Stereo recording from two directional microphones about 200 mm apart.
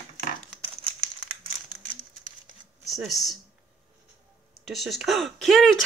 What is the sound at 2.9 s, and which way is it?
Speech, centre (ahead or behind).